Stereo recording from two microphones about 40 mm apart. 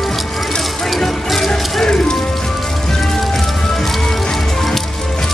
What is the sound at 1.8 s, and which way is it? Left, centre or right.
Music, centre.